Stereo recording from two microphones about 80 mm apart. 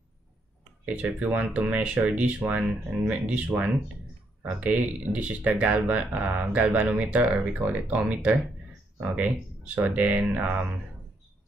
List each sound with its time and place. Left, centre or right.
0.8 s speech: centre